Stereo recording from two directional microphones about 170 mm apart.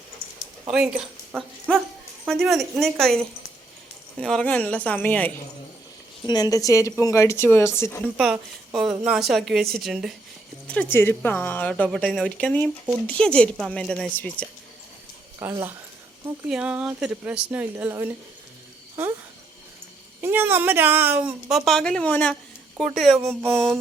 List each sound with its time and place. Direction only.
0.7 s a woman's voice: 5° right (ahead or behind)
4.2 s a woman's voice: 5° left (ahead or behind)
6.2 s a woman's voice: 25° left (ahead or behind)
8.0 s a woman's voice: centre (ahead or behind)
10.8 s a woman's voice: 10° left (ahead or behind)
15.4 s speech: 15° right (ahead or behind)
20.2 s a woman's voice: 15° right (ahead or behind)